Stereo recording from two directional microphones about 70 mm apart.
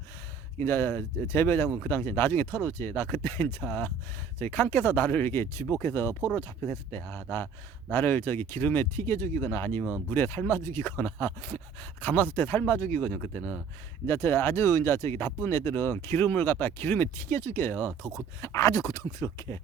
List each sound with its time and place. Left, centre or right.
0.6 s speech: left
14.1 s speech: left
18.3 s speech: left